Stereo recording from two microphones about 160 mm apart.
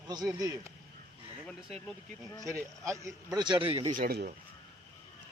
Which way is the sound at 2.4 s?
20° right (ahead or behind).